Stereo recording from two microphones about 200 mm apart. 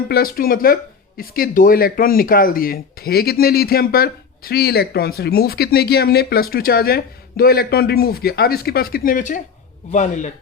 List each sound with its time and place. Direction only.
0.1 s speech: 45° left (ahead or behind)